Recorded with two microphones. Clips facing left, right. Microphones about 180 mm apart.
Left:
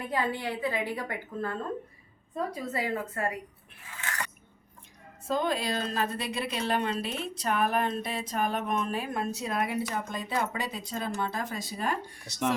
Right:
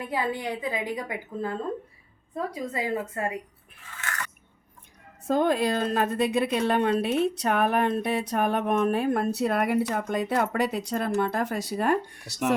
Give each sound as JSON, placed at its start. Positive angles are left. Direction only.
{"t": 0.0, "sound": "a woman's voice", "side_deg": -10}
{"t": 5.3, "sound": "a woman's voice", "side_deg": -55}